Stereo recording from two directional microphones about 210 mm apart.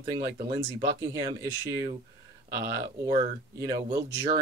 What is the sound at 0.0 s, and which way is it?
Speech, 20° right (ahead or behind).